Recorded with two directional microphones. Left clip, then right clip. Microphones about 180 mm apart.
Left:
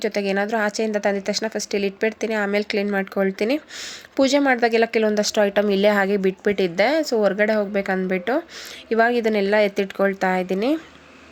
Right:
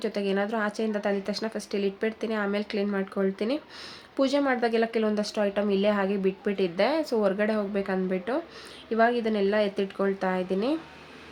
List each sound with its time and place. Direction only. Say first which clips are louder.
0.0 s speech: left 6 dB; 25° left (ahead or behind)